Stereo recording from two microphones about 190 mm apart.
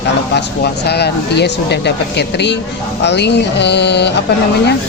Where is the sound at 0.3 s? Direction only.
60° left (ahead or behind).